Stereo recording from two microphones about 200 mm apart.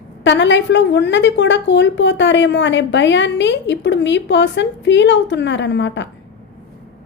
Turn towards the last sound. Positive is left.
turn(degrees=65)  # may be behind; listen again after turning